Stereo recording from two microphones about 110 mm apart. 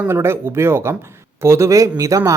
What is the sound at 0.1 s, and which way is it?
A man's voice, 20° right (ahead or behind).